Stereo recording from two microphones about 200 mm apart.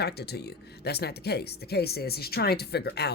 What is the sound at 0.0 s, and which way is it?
Speech, 55° left (ahead or behind).